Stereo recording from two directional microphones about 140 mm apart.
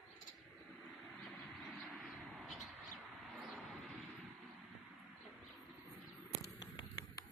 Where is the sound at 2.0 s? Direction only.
Centre (ahead or behind).